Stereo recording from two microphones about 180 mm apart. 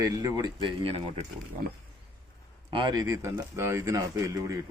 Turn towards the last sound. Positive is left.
turn(degrees=-15)  # may be behind; listen again after turning